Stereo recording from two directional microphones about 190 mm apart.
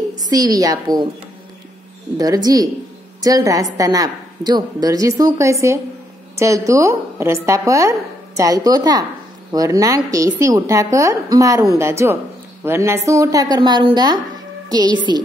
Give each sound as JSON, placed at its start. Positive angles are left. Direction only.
{"t": 0.2, "sound": "a woman's voice", "side_deg": -20}
{"t": 2.1, "sound": "a woman's voice", "side_deg": -20}